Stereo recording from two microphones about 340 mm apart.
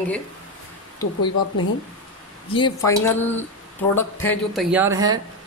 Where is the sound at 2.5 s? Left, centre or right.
Centre.